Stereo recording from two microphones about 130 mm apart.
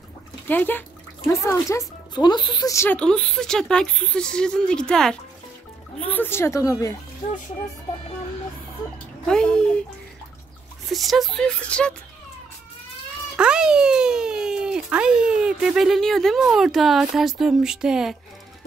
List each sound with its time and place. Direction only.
0.5 s speech: 15° left (ahead or behind); by 2.7 s 35° left (ahead or behind)
2.7 s speech: 20° left (ahead or behind)
3.0 s speech: 5° left (ahead or behind); by 7.0 s 25° left (ahead or behind)
9.2 s speech: 5° left (ahead or behind)
10.9 s speech: centre (ahead or behind)
13.4 s speech: 5° right (ahead or behind)